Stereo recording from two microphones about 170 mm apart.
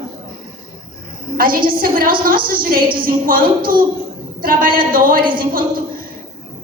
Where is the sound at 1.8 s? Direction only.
55° right (ahead or behind).